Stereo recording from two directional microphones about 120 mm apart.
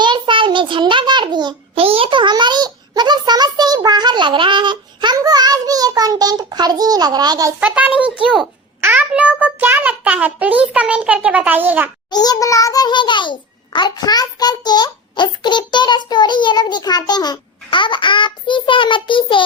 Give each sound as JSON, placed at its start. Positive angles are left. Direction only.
{"t": 0.0, "sound": "a sound", "side_deg": -40}
{"t": 7.6, "sound": "a child's voice", "side_deg": -10}
{"t": 12.1, "sound": "a child's voice", "side_deg": 35}